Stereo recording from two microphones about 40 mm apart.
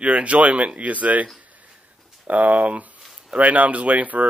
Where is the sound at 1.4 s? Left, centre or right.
Right.